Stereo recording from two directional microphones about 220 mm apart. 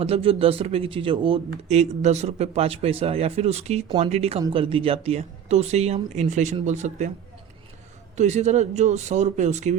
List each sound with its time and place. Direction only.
0.0 s speech: 25° right (ahead or behind)
8.1 s speech: 30° right (ahead or behind)